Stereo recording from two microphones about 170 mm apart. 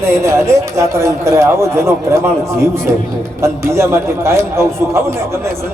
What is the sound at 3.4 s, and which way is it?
Speech, 15° right (ahead or behind).